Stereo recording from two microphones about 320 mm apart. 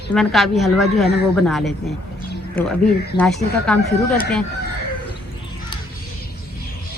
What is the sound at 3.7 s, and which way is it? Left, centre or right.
Speech, centre.